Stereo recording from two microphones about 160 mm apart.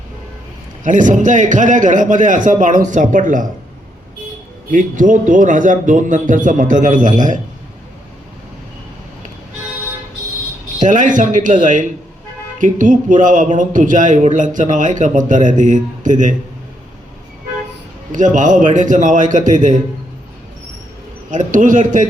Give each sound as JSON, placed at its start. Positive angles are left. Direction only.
{"t": 0.9, "sound": "a man's voice", "side_deg": -55}
{"t": 4.7, "sound": "a man's voice", "side_deg": -50}
{"t": 10.8, "sound": "a man's voice", "side_deg": -55}
{"t": 18.1, "sound": "a man's voice", "side_deg": -50}
{"t": 21.2, "sound": "a man's voice", "side_deg": -55}